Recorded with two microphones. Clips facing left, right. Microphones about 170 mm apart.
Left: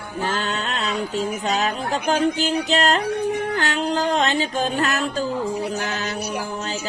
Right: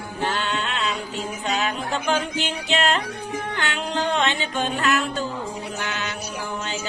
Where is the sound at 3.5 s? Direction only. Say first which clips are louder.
Left 5 dB; 40° left (ahead or behind).